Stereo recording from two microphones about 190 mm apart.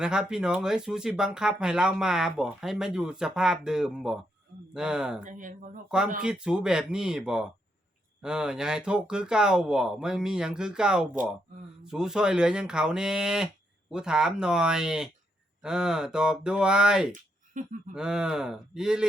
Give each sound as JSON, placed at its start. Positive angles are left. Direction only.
{"t": 0.0, "sound": "speech", "side_deg": -5}
{"t": 5.2, "sound": "speech", "side_deg": -45}
{"t": 5.9, "sound": "speech", "side_deg": -5}
{"t": 17.1, "sound": "a sound", "side_deg": -40}
{"t": 17.9, "sound": "speech", "side_deg": -5}